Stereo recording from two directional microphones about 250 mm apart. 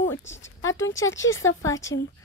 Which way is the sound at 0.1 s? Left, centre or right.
Left.